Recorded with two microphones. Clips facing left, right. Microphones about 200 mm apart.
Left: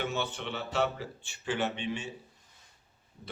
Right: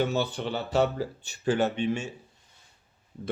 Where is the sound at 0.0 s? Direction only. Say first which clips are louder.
Right 7 dB; 35° right (ahead or behind).